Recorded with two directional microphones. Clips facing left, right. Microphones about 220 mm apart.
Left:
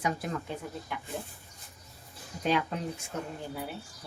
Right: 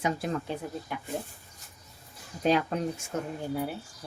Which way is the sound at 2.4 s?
40° right (ahead or behind).